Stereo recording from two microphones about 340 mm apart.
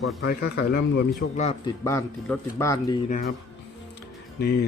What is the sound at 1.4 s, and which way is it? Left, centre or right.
A man's voice, centre.